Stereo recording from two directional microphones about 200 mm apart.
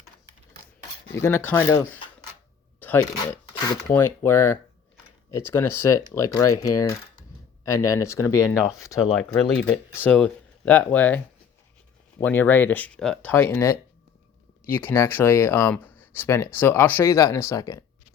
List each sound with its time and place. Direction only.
1.1 s speech: 15° left (ahead or behind)
9.0 s speech: centre (ahead or behind)
12.2 s speech: 10° left (ahead or behind)